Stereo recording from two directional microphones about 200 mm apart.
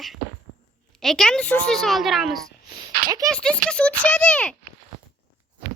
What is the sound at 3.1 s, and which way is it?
Speech, 20° right (ahead or behind).